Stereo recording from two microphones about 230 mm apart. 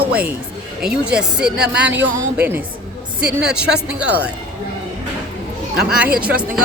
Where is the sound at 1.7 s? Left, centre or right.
Right.